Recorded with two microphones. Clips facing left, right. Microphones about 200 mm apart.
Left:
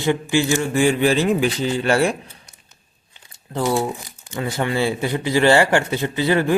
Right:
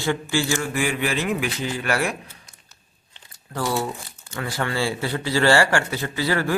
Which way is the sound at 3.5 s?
20° left (ahead or behind).